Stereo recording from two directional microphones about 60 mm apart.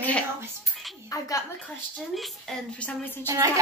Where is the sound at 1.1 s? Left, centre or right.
Left.